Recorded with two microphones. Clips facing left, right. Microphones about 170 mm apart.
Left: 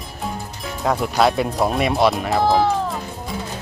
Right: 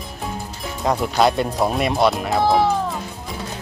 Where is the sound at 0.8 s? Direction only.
Centre (ahead or behind).